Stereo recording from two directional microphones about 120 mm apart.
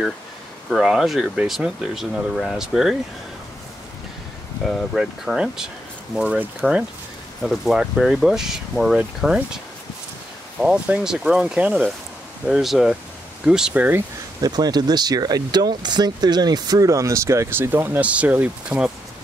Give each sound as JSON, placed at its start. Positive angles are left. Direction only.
{"t": 0.7, "sound": "speech", "side_deg": 0}
{"t": 4.6, "sound": "speech", "side_deg": 0}
{"t": 10.6, "sound": "speech", "side_deg": -5}
{"t": 14.4, "sound": "speech", "side_deg": -35}